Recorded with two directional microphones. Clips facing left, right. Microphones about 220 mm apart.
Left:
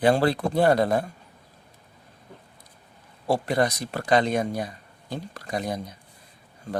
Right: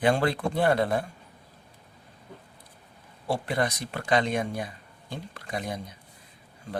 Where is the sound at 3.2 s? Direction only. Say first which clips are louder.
Left 4 dB; 40° left (ahead or behind).